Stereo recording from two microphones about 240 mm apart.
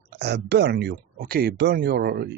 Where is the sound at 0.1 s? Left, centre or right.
Right.